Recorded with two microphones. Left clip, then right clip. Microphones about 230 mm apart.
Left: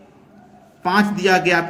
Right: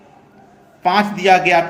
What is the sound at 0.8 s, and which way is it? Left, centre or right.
Speech, left.